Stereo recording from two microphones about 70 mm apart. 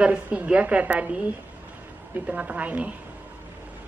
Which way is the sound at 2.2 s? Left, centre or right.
Centre.